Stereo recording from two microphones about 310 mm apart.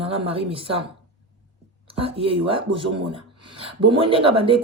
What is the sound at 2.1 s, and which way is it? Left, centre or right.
Speech, centre.